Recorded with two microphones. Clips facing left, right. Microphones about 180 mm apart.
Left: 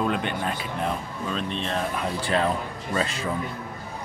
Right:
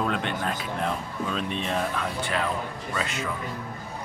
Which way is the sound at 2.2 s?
35° left (ahead or behind).